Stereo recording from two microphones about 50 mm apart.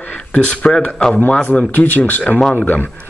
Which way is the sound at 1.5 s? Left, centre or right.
Left.